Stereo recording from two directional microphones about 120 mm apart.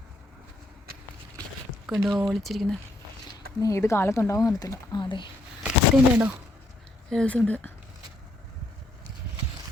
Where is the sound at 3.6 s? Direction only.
25° left (ahead or behind); by 5.3 s 40° left (ahead or behind).